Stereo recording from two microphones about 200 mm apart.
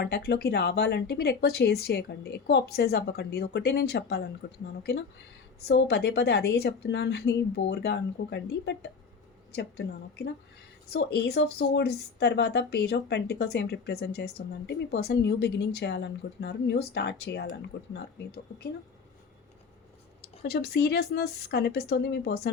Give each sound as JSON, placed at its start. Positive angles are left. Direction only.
{"t": 0.0, "sound": "speech", "side_deg": 55}
{"t": 20.2, "sound": "speech", "side_deg": 50}